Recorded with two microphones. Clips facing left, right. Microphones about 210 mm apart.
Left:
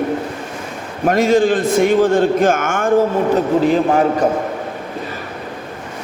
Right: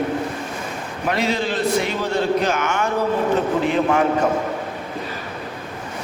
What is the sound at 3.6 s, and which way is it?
Speech, 35° left (ahead or behind).